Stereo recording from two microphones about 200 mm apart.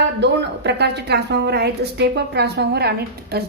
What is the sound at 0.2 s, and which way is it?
A woman's voice, 60° right (ahead or behind).